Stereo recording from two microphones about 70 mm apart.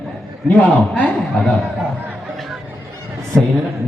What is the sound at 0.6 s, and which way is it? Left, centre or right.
Speech, centre.